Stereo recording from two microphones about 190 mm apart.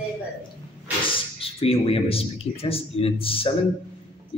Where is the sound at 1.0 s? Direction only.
30° left (ahead or behind).